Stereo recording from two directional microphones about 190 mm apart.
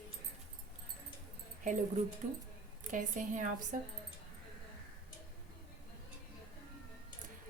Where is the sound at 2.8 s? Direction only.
40° right (ahead or behind).